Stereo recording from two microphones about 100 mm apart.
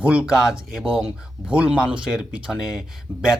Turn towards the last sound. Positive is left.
turn(degrees=-5)  # may be behind; listen again after turning